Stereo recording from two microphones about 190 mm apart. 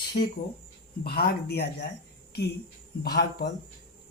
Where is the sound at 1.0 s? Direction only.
55° left (ahead or behind).